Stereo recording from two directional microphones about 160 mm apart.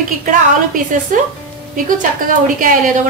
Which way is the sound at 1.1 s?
55° right (ahead or behind).